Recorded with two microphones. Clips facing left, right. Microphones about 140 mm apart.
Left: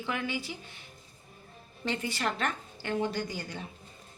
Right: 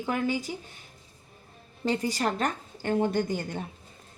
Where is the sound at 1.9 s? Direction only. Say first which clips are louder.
Right 5 dB; 40° right (ahead or behind).